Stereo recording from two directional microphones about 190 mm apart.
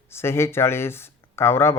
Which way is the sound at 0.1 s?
15° left (ahead or behind).